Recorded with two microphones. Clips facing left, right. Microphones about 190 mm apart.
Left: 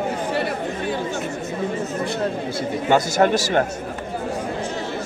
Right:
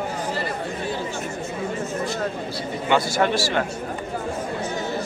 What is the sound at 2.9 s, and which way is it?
Speech, 45° left (ahead or behind).